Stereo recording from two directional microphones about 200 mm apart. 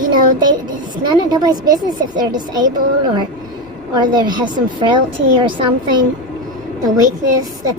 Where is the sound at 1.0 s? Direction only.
20° right (ahead or behind).